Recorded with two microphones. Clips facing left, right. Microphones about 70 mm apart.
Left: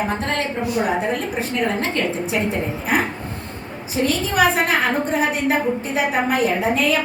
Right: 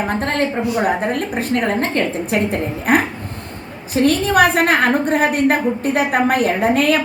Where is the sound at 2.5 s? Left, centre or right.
Right.